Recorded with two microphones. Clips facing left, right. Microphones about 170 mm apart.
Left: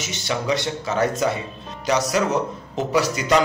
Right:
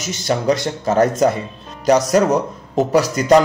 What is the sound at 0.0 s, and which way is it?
A man's voice, 45° right (ahead or behind).